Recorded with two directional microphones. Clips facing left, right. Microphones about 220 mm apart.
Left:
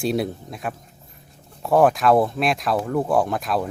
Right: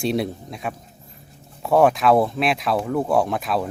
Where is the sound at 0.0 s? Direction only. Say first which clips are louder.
Even; centre (ahead or behind).